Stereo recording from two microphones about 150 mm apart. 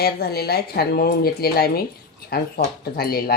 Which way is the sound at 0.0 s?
90° left.